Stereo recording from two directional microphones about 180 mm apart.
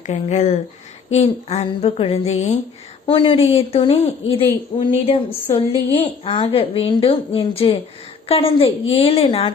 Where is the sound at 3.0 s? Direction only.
25° left (ahead or behind).